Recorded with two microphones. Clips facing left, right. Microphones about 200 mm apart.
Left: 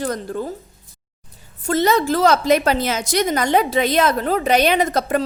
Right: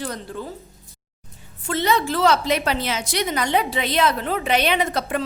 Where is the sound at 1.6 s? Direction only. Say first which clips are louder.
Left 4 dB; 45° left (ahead or behind).